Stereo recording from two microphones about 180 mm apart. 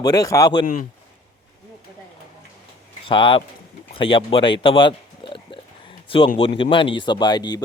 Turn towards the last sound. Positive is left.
turn(degrees=25)  # may be behind; listen again after turning